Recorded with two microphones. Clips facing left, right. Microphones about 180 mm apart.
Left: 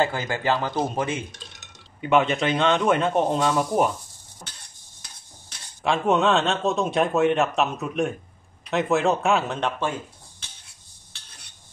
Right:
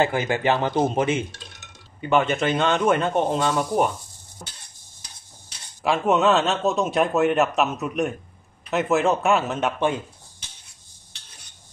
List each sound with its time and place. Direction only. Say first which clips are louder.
0.0 s speech: right 3 dB; 20° right (ahead or behind)
2.0 s speech: even; centre (ahead or behind)
5.8 s speech: right 1 dB; centre (ahead or behind)